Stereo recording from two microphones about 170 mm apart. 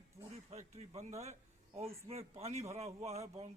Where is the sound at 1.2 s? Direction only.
40° right (ahead or behind).